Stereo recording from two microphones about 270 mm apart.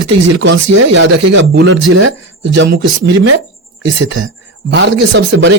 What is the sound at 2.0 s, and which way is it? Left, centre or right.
Speech, right.